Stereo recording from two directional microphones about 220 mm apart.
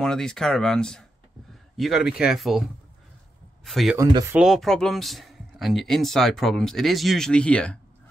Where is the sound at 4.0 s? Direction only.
15° right (ahead or behind).